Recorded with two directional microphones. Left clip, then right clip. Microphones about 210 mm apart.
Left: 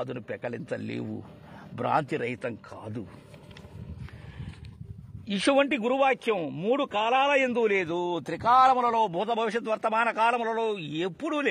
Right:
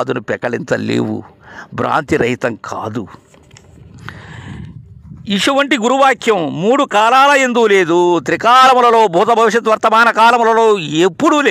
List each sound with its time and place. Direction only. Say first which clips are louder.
0.0 s a man's voice: right 16 dB; 45° right (ahead or behind)
5.2 s a man's voice: right 10 dB; 55° right (ahead or behind)